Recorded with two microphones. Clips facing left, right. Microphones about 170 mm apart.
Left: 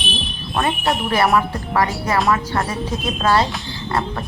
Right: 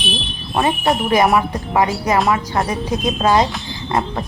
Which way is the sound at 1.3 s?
15° right (ahead or behind).